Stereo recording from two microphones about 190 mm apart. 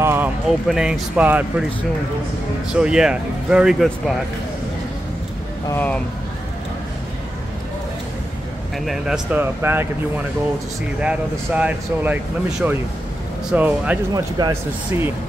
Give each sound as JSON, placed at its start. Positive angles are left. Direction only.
{"t": 0.0, "sound": "a sound", "side_deg": -10}
{"t": 0.5, "sound": "speech", "side_deg": 0}
{"t": 2.7, "sound": "speech", "side_deg": -5}
{"t": 5.7, "sound": "speech", "side_deg": 10}
{"t": 8.7, "sound": "speech", "side_deg": 0}
{"t": 11.0, "sound": "speech", "side_deg": -5}
{"t": 14.1, "sound": "speech", "side_deg": -20}